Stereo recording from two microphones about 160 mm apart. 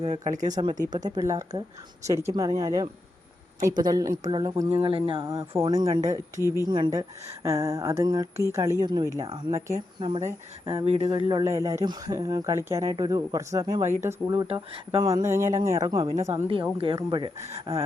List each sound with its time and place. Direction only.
0.0 s speech: 45° right (ahead or behind)
0.5 s speech: 25° right (ahead or behind)
4.7 s speech: 35° right (ahead or behind)
5.2 s speech: 20° right (ahead or behind)
10.2 s speech: 35° right (ahead or behind)
11.4 s speech: 20° right (ahead or behind)
14.4 s speech: 35° right (ahead or behind)
15.1 s speech: 20° right (ahead or behind)
16.7 s speech: 30° right (ahead or behind)